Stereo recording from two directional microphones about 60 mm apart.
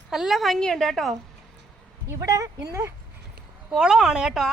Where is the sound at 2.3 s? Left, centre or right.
Right.